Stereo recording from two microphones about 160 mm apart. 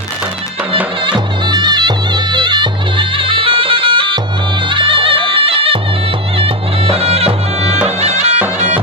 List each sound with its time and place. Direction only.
1.0 s music: 30° right (ahead or behind)
7.9 s bagpipes: 40° right (ahead or behind)
8.5 s music: 45° right (ahead or behind)